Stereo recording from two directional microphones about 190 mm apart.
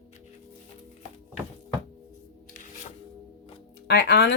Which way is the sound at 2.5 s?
45° left (ahead or behind).